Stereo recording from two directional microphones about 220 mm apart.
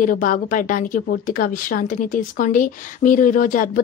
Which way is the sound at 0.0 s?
40° left (ahead or behind).